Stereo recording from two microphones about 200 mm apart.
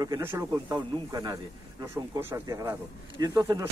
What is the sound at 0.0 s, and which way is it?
A man's voice, 15° right (ahead or behind).